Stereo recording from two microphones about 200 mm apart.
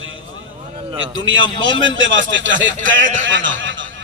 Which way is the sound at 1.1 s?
75° right (ahead or behind).